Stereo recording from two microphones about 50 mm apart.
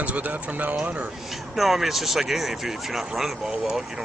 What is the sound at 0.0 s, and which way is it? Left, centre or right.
Speech, right.